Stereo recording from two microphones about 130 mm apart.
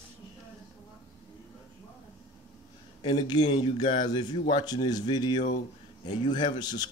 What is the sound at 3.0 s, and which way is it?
A man's voice, 35° left (ahead or behind).